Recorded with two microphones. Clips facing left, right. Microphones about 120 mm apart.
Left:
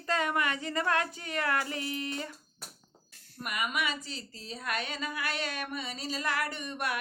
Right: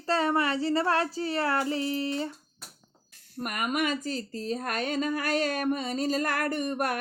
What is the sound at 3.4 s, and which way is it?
Speech, 45° right (ahead or behind).